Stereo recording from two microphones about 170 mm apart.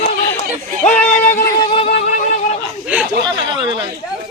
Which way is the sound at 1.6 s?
30° left (ahead or behind).